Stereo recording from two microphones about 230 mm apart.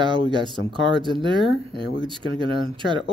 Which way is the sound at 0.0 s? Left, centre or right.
Right.